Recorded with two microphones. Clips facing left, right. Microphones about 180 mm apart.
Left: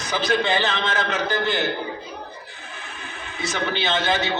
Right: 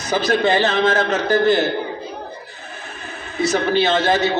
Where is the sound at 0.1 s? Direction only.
40° right (ahead or behind).